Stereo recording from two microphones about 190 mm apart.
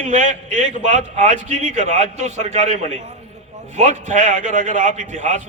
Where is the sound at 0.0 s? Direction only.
40° right (ahead or behind).